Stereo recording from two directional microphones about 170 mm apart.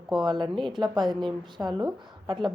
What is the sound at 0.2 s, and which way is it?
A woman's voice, 25° right (ahead or behind).